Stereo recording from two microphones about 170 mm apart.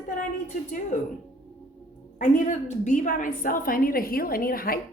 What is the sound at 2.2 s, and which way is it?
A woman's voice, 45° left (ahead or behind).